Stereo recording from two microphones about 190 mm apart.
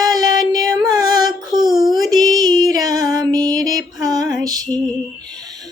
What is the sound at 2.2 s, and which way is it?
Music, 20° right (ahead or behind).